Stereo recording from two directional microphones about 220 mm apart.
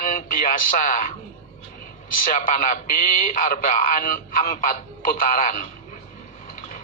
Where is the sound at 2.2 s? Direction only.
40° left (ahead or behind).